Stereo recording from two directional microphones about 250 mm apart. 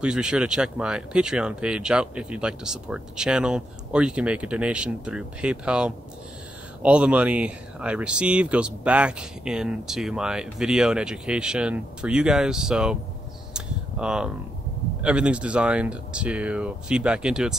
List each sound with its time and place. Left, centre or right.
0.0 s speech: centre
13.5 s camera: centre
15.0 s speech: centre